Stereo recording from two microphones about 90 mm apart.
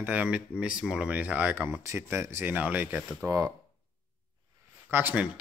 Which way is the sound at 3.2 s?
40° right (ahead or behind).